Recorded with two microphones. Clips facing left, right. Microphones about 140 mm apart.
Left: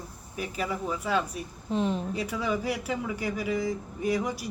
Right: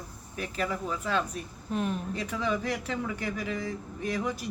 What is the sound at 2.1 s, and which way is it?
A man's voice, 10° left (ahead or behind).